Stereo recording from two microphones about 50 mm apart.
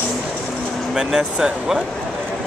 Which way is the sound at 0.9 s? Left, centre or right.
Centre.